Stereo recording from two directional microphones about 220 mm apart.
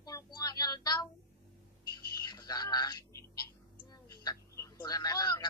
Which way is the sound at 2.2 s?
20° left (ahead or behind).